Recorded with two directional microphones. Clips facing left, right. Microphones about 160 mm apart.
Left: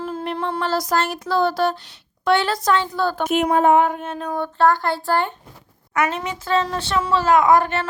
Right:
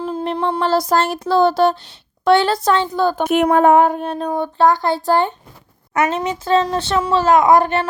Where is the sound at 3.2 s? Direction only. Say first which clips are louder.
Right 3 dB; 60° right (ahead or behind).